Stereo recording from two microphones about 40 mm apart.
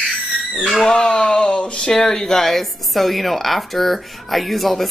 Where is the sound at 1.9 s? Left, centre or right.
Centre.